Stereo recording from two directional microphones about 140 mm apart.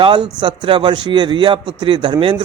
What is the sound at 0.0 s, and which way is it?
A man's voice, 35° right (ahead or behind).